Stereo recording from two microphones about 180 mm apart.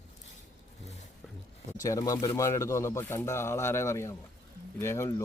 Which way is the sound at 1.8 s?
20° left (ahead or behind).